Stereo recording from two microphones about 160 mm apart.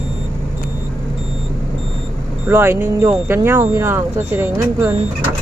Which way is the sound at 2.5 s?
15° right (ahead or behind).